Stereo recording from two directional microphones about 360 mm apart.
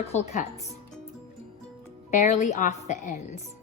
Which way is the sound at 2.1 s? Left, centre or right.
Left.